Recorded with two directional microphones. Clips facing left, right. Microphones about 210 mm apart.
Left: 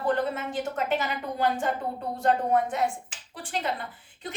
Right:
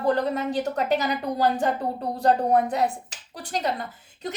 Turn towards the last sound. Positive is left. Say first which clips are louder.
# right 5 dB
turn(degrees=-40)  # may be behind; listen again after turning